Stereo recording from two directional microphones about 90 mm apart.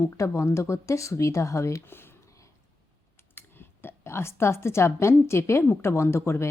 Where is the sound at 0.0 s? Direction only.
30° left (ahead or behind).